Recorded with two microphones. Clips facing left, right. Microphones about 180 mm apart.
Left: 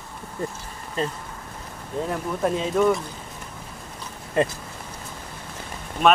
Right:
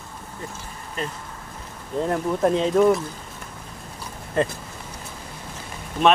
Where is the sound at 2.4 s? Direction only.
Centre (ahead or behind).